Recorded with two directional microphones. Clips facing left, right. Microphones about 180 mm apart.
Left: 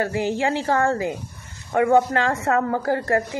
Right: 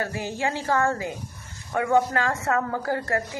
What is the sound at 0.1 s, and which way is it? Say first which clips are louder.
Speech: left 6 dB; 15° left (ahead or behind).